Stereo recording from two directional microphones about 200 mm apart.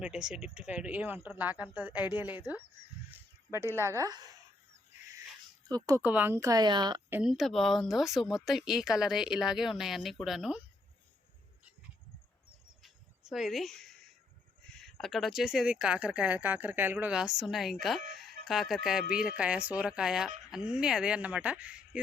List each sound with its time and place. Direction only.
0.0 s speech: 5° right (ahead or behind)
3.1 s a sound: 15° right (ahead or behind)
3.8 s speech: 15° right (ahead or behind)
5.6 s speech: 20° right (ahead or behind)
7.1 s speech: 5° right (ahead or behind)
12.8 s cricket: centre (ahead or behind)
14.8 s speech: centre (ahead or behind)